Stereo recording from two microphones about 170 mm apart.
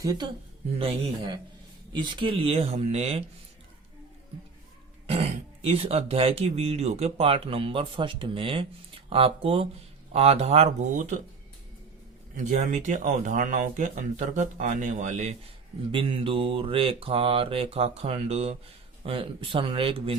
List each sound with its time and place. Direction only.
0.0 s speech: 25° right (ahead or behind)
1.9 s speech: 25° right (ahead or behind)
5.0 s speech: 35° right (ahead or behind)
12.5 s speech: 45° right (ahead or behind)
15.9 s speech: 30° right (ahead or behind)